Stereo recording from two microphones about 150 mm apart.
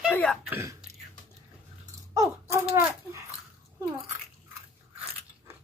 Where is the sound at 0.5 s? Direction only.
20° right (ahead or behind).